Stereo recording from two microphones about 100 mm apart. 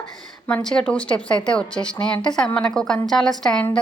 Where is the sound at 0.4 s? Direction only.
10° left (ahead or behind).